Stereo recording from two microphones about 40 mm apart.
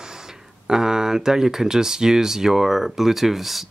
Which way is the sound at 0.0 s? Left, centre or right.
Centre.